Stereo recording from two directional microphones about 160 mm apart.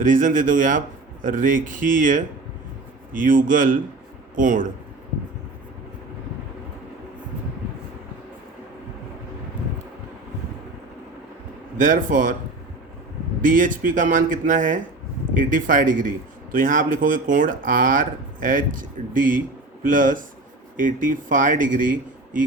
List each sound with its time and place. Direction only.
0.0 s a man's voice: 55° right (ahead or behind)
11.8 s a man's voice: 55° right (ahead or behind)
13.4 s a man's voice: 55° right (ahead or behind)